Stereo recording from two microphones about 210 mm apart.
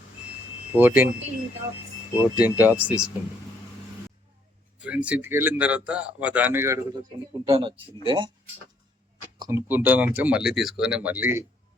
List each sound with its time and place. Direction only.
0.7 s speech: 10° right (ahead or behind)
2.1 s speech: 10° right (ahead or behind)
4.8 s speech: 5° right (ahead or behind); by 8.3 s 25° right (ahead or behind)
9.4 s speech: 10° right (ahead or behind)